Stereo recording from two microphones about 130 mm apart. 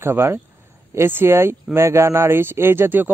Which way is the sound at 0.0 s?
20° right (ahead or behind).